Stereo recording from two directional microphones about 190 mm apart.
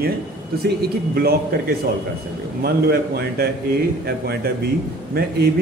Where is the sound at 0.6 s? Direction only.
55° right (ahead or behind).